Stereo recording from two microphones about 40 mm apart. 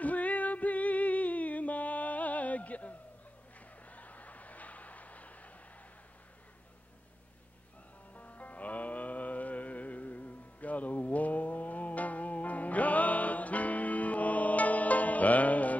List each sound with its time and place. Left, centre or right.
0.0 s music: left
3.8 s a sound: left
8.1 s music: left